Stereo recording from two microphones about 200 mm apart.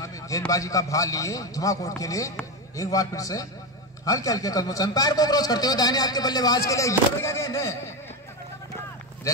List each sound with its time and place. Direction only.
0.5 s a man's voice: 15° left (ahead or behind)